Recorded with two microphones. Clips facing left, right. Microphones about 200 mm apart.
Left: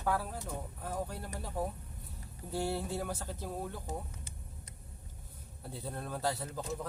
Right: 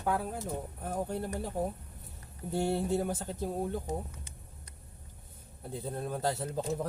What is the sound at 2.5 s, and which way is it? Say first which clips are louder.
Speech: right 5 dB; 25° right (ahead or behind).